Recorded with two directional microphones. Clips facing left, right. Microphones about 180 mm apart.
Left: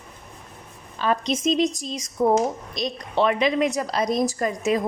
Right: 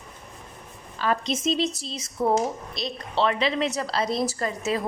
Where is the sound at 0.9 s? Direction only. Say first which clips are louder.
Left 2 dB; 20° left (ahead or behind).